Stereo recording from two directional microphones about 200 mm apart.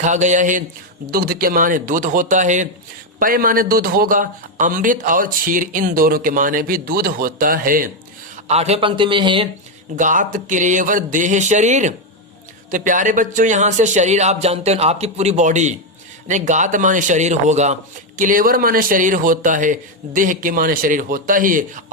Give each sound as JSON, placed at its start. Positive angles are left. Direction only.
{"t": 0.0, "sound": "a man's voice", "side_deg": -35}
{"t": 8.4, "sound": "speech", "side_deg": -30}
{"t": 9.9, "sound": "a man's voice", "side_deg": -40}